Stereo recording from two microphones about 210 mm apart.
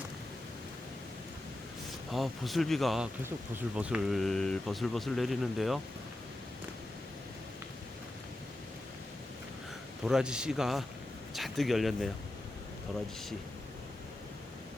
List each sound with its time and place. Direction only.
2.1 s speech: centre (ahead or behind)
10.0 s speech: centre (ahead or behind)